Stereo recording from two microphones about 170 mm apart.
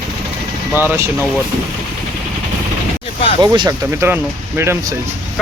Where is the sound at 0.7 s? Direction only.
10° right (ahead or behind).